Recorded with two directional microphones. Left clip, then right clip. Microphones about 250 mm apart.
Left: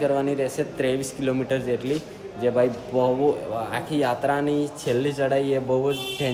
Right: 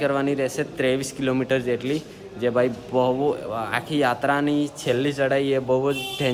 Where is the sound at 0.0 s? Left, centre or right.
Right.